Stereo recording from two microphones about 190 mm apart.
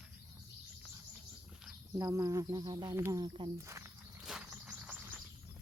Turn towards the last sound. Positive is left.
turn(degrees=-5)  # may be behind; listen again after turning